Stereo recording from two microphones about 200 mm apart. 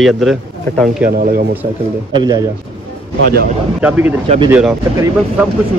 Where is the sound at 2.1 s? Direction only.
20° right (ahead or behind).